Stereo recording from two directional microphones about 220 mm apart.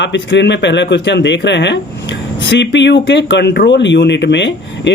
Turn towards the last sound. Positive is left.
turn(degrees=55)  # may be behind; listen again after turning